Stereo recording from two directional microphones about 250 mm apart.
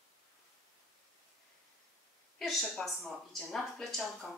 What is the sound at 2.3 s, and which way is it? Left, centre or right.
Speech, centre.